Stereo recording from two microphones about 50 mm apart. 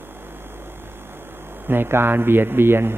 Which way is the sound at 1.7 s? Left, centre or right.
Right.